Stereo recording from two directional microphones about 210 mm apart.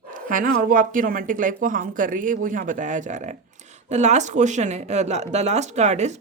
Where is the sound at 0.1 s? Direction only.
40° right (ahead or behind).